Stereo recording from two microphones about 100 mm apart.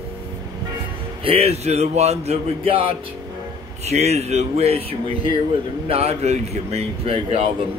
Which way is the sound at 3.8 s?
90° right.